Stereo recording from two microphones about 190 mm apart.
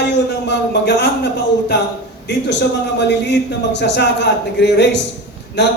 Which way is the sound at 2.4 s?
65° left (ahead or behind).